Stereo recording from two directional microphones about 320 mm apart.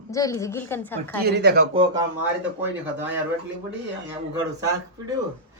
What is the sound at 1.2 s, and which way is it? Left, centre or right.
Speech, right.